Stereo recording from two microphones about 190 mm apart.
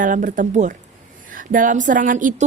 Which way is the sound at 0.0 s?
45° right (ahead or behind).